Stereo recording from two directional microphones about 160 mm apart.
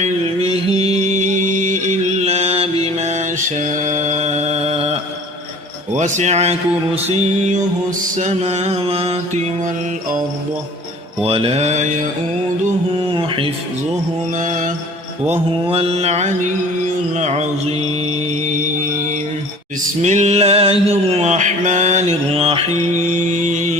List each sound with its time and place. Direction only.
0.5 s music: 40° right (ahead or behind)
5.9 s speech: 50° right (ahead or behind)
11.2 s mantra: 35° right (ahead or behind)
13.1 s mantra: 35° right (ahead or behind)
14.3 s mantra: 55° right (ahead or behind)
15.3 s mantra: 35° right (ahead or behind)
17.2 s speech: 45° right (ahead or behind)
20.0 s mantra: 45° right (ahead or behind)